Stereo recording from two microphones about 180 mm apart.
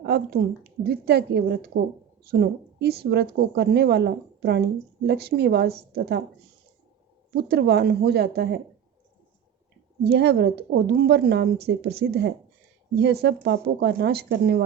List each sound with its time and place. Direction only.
0.0 s a woman's voice: 60° right (ahead or behind)
7.3 s a woman's voice: 60° right (ahead or behind)
10.0 s a woman's voice: 65° right (ahead or behind)